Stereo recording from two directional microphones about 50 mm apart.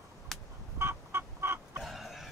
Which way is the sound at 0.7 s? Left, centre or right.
Right.